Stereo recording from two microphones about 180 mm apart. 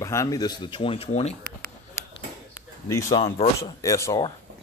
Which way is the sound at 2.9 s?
15° left (ahead or behind).